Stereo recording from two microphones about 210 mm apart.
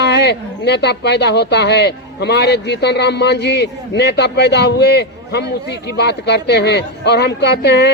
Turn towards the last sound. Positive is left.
turn(degrees=55)  # may be behind; listen again after turning